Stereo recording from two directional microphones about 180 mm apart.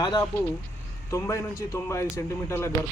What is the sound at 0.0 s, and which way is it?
Speech, 20° left (ahead or behind).